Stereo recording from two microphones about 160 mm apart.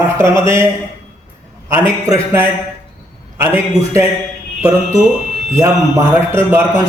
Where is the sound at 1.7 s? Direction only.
15° right (ahead or behind).